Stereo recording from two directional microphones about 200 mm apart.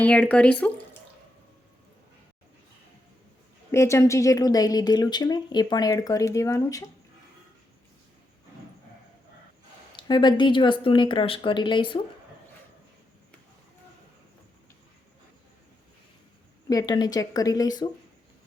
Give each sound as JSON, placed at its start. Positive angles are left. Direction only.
{"t": 0.0, "sound": "a woman's voice", "side_deg": 5}
{"t": 3.7, "sound": "a woman's voice", "side_deg": 15}
{"t": 9.9, "sound": "speech", "side_deg": 25}
{"t": 16.6, "sound": "speech", "side_deg": 20}